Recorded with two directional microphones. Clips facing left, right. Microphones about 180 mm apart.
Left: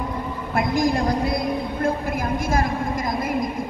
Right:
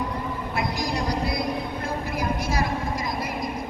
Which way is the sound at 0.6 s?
50° left (ahead or behind).